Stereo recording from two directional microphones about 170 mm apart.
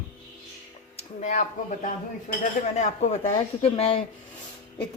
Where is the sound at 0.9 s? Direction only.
45° left (ahead or behind).